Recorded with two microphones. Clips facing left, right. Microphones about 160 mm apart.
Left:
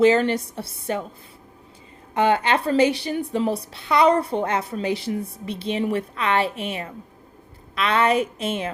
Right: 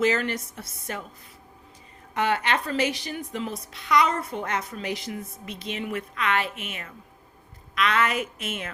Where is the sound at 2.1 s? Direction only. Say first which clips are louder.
Left 5 dB; 30° left (ahead or behind).